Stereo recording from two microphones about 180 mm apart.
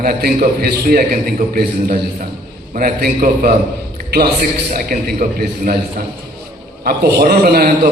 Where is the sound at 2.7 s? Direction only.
55° right (ahead or behind).